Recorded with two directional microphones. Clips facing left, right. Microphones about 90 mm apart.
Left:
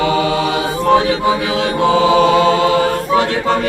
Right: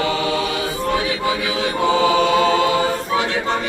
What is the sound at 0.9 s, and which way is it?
Chant, 30° left (ahead or behind).